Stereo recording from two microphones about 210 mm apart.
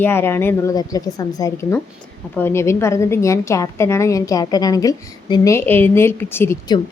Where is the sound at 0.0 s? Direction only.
10° left (ahead or behind).